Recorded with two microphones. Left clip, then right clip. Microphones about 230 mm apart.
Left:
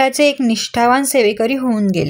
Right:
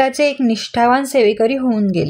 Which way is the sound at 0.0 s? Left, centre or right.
Left.